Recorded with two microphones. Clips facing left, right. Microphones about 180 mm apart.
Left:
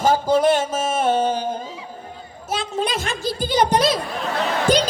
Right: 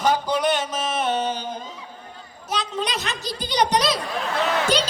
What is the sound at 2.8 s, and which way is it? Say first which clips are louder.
A man's voice: left 4 dB; 50° left (ahead or behind).